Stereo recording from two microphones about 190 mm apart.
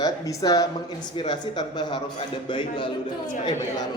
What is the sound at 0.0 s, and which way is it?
A man's voice, 20° left (ahead or behind).